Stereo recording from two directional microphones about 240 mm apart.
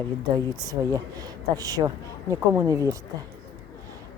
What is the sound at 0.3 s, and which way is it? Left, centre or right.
Speech, centre.